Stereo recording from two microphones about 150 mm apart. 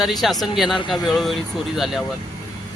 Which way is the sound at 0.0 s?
Centre (ahead or behind).